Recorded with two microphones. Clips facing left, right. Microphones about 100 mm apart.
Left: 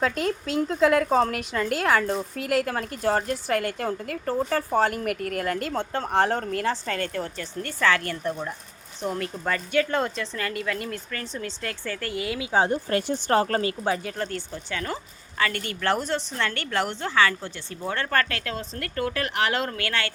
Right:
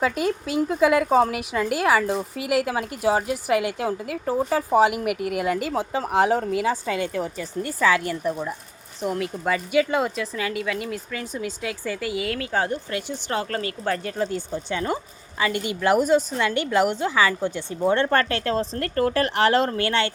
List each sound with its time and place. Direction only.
0.0 s speech: 5° right (ahead or behind)
12.4 s speech: 15° left (ahead or behind)
12.9 s speech: 50° left (ahead or behind)
13.4 s speech: 30° left (ahead or behind)
14.0 s speech: centre (ahead or behind)
14.3 s a woman's voice: 15° right (ahead or behind)